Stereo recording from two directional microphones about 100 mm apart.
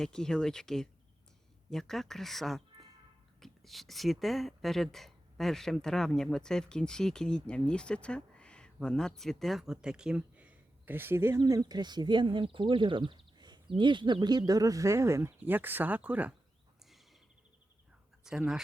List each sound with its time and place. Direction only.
0.0 s speech: 5° left (ahead or behind); by 16.3 s 15° right (ahead or behind)
18.2 s speech: 5° right (ahead or behind)